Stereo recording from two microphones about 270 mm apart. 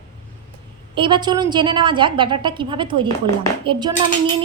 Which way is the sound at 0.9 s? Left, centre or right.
Centre.